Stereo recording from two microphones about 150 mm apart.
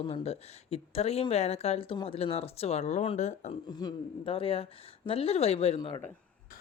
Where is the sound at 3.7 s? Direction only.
25° left (ahead or behind).